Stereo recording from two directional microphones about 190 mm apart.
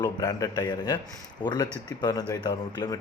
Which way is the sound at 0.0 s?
20° left (ahead or behind).